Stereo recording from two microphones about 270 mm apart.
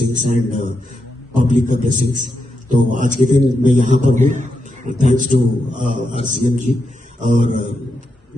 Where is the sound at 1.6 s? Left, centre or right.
Right.